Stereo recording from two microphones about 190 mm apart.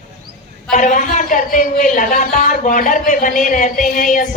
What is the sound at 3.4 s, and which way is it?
Music, 40° left (ahead or behind).